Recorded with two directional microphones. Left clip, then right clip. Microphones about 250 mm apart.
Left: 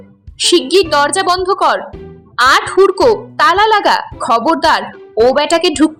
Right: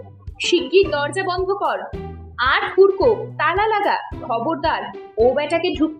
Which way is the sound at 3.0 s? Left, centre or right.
Left.